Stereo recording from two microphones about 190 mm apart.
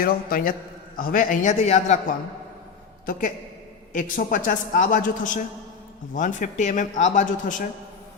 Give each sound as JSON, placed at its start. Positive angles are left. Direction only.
{"t": 0.0, "sound": "a woman's voice", "side_deg": 50}
{"t": 3.1, "sound": "a woman's voice", "side_deg": 45}